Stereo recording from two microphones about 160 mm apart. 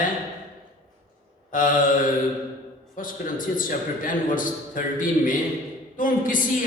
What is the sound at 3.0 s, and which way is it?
A man's voice, 55° left (ahead or behind).